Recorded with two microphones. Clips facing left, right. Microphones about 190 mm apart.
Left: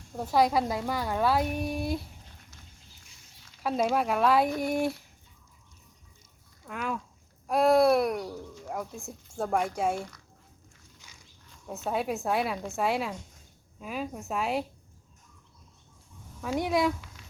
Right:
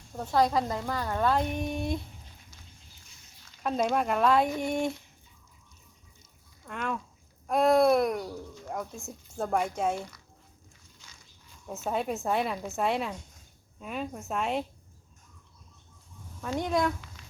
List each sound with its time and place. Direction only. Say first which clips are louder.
0.2 s a woman's voice: left 1 dB; 10° left (ahead or behind)
3.4 s speech: left 1 dB; 5° left (ahead or behind)
6.7 s speech: even; 5° left (ahead or behind)
11.6 s speech: even; centre (ahead or behind)
16.4 s speech: left 1 dB; 5° left (ahead or behind)